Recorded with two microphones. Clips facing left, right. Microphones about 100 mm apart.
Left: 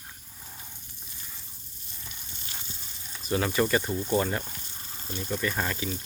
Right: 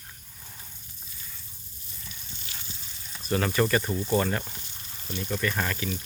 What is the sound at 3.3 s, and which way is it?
Speech, 15° left (ahead or behind).